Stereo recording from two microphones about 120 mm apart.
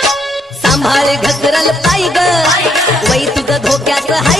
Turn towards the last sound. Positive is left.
turn(degrees=0)  # may be behind; listen again after turning